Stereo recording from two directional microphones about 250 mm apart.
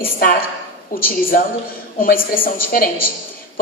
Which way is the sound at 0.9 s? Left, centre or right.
Left.